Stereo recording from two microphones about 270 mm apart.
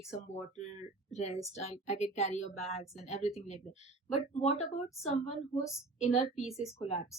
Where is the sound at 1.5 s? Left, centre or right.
Left.